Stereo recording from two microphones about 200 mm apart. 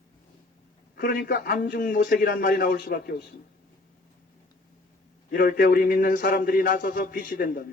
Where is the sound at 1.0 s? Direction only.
45° left (ahead or behind).